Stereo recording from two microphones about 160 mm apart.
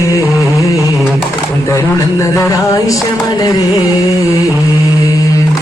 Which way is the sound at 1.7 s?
20° left (ahead or behind).